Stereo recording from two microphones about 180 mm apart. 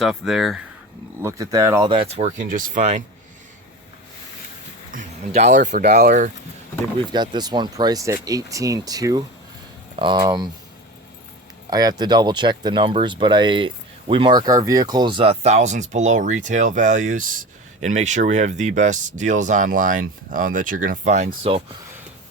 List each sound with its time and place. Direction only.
0.0 s speech: centre (ahead or behind)
1.2 s speech: 15° right (ahead or behind)
1.9 s speech: 30° right (ahead or behind)
4.9 s speech: 40° right (ahead or behind)
7.1 s speech: 25° right (ahead or behind)
11.7 s speech: 20° right (ahead or behind)